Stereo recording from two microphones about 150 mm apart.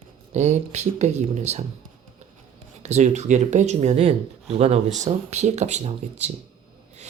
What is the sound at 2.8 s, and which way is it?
Speech, 50° right (ahead or behind).